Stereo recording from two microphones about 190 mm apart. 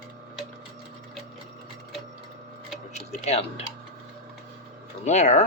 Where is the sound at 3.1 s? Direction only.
35° left (ahead or behind).